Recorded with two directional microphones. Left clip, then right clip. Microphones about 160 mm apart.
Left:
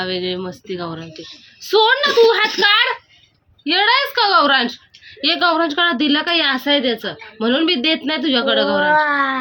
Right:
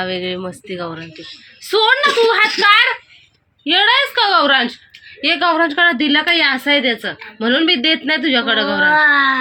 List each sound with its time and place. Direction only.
0.0 s speech: 20° right (ahead or behind)
0.9 s a woman's voice: 5° right (ahead or behind)
9.0 s speech: 25° left (ahead or behind)